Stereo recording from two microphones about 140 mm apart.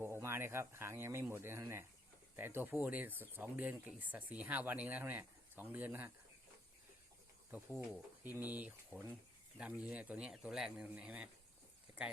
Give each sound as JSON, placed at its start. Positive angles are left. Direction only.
{"t": 0.0, "sound": "speech", "side_deg": -15}
{"t": 7.5, "sound": "speech", "side_deg": -5}